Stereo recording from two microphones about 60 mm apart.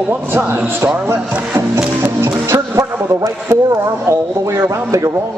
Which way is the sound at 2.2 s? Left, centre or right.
Right.